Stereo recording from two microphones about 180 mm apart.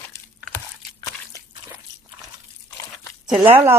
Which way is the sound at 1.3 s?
20° left (ahead or behind).